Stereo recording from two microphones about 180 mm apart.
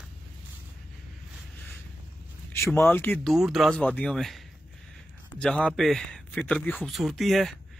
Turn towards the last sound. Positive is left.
turn(degrees=0)  # may be behind; listen again after turning